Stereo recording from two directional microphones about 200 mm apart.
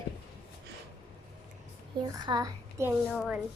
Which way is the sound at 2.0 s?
20° right (ahead or behind).